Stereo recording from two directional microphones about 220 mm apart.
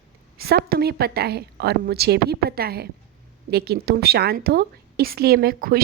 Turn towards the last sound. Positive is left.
turn(degrees=-45)  # may be behind; listen again after turning